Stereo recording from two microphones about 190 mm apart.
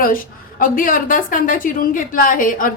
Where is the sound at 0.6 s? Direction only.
45° left (ahead or behind).